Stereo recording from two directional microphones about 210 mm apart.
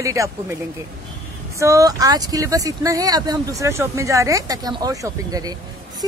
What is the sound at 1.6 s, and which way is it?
Speech, 15° right (ahead or behind).